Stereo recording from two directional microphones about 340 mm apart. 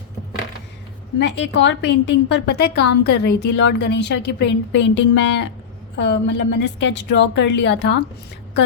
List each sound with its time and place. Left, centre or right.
1.2 s a woman's voice: left